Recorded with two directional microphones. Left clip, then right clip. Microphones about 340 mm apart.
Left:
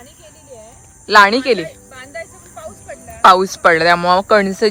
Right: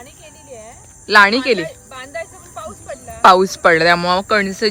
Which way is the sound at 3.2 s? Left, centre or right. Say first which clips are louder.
Left 1 dB; centre.